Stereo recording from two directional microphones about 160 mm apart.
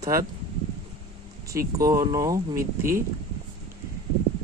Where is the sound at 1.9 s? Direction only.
20° right (ahead or behind).